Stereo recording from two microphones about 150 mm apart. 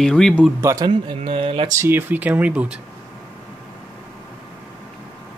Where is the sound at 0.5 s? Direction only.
20° right (ahead or behind); by 1.7 s 40° right (ahead or behind).